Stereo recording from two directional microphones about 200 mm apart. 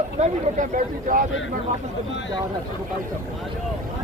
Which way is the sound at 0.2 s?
40° right (ahead or behind).